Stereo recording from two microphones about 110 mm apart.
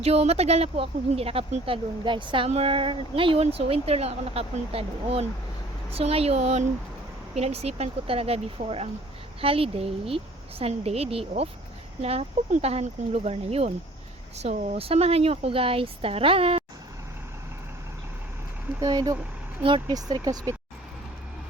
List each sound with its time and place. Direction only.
0.0 s speech: 70° right (ahead or behind)
0.8 s a woman's voice: 60° right (ahead or behind)
2.5 s a woman's voice: 65° right (ahead or behind)
3.4 s speech: 65° right (ahead or behind); by 6.7 s 90° right
7.3 s speech: 70° right (ahead or behind)
18.8 s speech: 35° right (ahead or behind)